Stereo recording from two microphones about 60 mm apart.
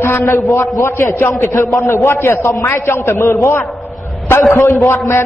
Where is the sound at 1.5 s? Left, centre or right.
Left.